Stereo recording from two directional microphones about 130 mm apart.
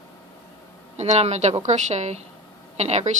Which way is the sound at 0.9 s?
55° right (ahead or behind).